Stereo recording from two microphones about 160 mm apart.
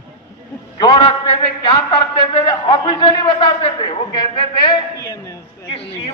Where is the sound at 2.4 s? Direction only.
35° left (ahead or behind).